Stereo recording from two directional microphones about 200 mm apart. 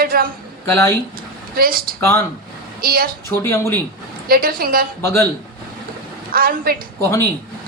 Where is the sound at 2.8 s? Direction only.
50° right (ahead or behind).